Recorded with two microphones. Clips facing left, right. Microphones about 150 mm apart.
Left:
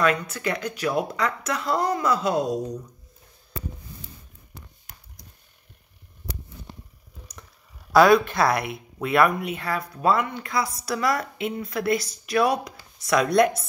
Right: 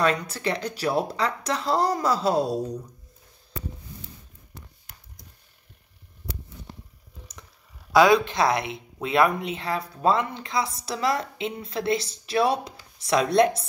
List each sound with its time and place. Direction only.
0.0 s speech: 35° right (ahead or behind)
8.0 s speech: 20° right (ahead or behind)